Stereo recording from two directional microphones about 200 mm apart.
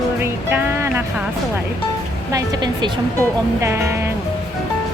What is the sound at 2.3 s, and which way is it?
A woman's voice, 20° right (ahead or behind).